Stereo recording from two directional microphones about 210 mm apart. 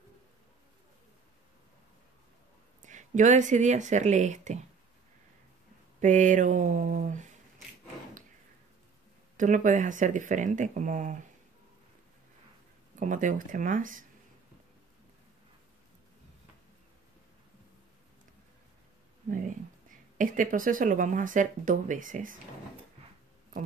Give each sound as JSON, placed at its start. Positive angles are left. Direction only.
{"t": 2.8, "sound": "speech", "side_deg": -35}
{"t": 5.9, "sound": "speech", "side_deg": -35}
{"t": 9.4, "sound": "speech", "side_deg": -40}
{"t": 13.0, "sound": "speech", "side_deg": -35}
{"t": 20.2, "sound": "speech", "side_deg": -40}